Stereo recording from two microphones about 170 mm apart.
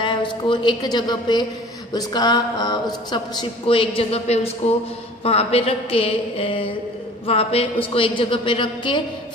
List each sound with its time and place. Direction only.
0.0 s a woman's voice: 30° left (ahead or behind)